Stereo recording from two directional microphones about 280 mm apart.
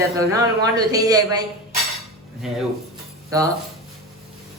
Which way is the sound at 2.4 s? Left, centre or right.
Centre.